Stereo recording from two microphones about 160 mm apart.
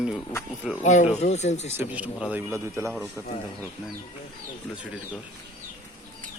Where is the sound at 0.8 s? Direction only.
50° left (ahead or behind).